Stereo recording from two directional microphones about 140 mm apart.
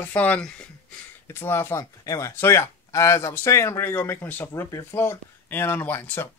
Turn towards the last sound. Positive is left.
turn(degrees=15)  # may be behind; listen again after turning